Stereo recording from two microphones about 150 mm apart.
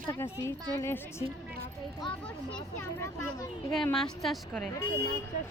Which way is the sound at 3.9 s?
Centre (ahead or behind).